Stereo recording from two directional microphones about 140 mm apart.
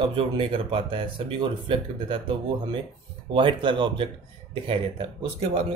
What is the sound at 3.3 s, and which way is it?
Speech, 35° right (ahead or behind).